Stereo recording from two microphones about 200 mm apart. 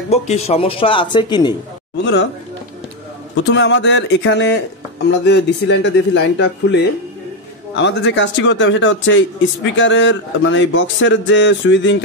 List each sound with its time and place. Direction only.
0.1 s speech: 30° left (ahead or behind)
3.3 s a man's voice: 65° left (ahead or behind)